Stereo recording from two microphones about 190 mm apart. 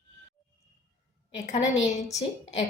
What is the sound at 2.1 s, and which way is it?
Speech, 35° left (ahead or behind).